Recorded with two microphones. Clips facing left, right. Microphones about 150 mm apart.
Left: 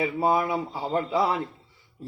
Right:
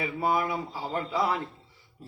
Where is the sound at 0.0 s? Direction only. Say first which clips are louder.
Left 4 dB; 25° left (ahead or behind).